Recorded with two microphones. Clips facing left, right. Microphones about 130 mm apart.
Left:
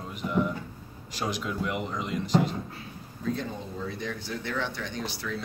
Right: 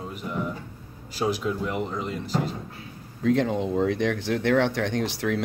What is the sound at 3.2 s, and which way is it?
Speech, 90° right.